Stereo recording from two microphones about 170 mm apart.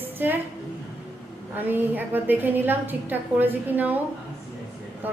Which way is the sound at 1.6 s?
10° right (ahead or behind).